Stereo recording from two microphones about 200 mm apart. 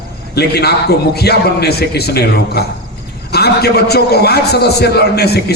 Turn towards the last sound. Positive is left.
turn(degrees=55)  # may be behind; listen again after turning